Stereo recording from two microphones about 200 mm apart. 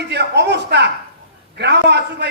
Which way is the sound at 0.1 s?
60° right (ahead or behind).